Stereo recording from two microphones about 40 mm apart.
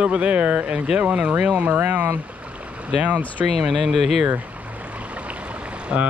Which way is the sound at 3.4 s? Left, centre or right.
Centre.